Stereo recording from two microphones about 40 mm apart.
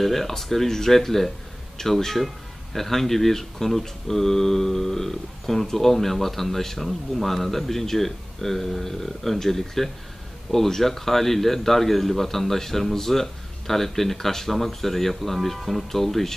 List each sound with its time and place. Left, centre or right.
0.0 s a man's voice: centre